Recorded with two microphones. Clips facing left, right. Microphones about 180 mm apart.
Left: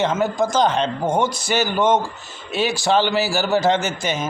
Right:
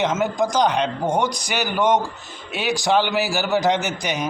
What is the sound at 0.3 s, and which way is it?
A man's voice, 15° right (ahead or behind).